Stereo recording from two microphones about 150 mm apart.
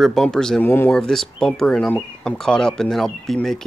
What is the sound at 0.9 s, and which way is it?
Speech, 5° left (ahead or behind).